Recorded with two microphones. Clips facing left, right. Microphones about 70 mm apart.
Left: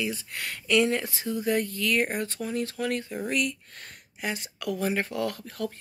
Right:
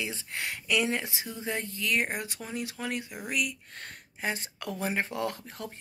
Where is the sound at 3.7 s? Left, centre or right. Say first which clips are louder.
Right 2 dB; right.